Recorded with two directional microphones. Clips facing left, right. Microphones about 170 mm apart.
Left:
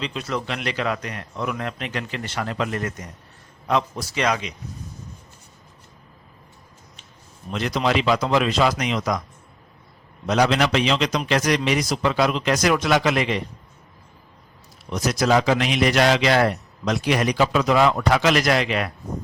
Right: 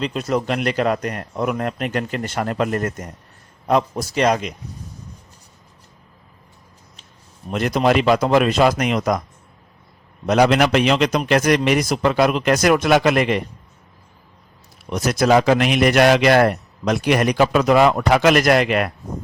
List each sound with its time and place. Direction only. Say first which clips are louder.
0.0 s a man's voice: right 6 dB; 45° right (ahead or behind)
7.5 s a man's voice: right 5 dB; 50° right (ahead or behind)
10.2 s a man's voice: right 4 dB; 55° right (ahead or behind)
14.8 s a man's voice: right 4 dB; 55° right (ahead or behind)